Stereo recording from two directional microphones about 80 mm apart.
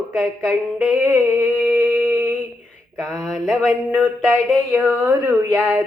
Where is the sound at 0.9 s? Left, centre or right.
Right.